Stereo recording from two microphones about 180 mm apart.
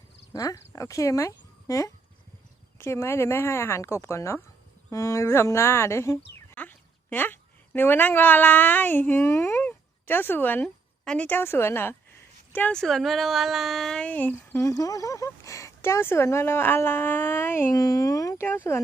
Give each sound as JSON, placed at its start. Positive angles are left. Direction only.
{"t": 0.3, "sound": "a woman's voice", "side_deg": 20}